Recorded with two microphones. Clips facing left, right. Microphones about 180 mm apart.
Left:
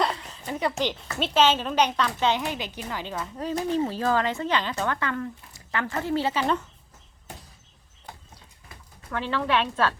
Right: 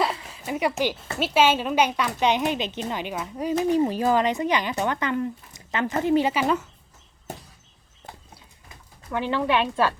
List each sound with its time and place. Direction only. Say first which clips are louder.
0.0 s a sound: right 1 dB; 5° right (ahead or behind)
1.2 s a woman's voice: right 1 dB; 10° right (ahead or behind)
9.0 s a woman's voice: right 3 dB; 15° right (ahead or behind)